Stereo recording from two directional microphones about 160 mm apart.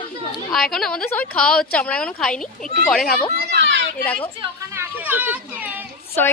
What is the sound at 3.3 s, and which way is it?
Children playing, 90° right.